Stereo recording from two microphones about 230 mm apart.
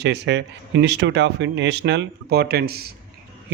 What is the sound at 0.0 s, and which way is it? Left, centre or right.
Speech, right.